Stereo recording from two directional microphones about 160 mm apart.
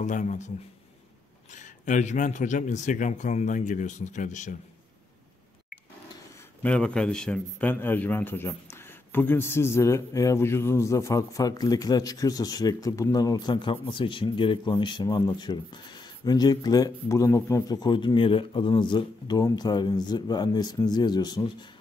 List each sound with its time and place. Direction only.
0.0 s speech: 50° left (ahead or behind)
1.5 s speech: 50° left (ahead or behind)
6.6 s a man's voice: 5° left (ahead or behind); by 21.6 s 25° left (ahead or behind)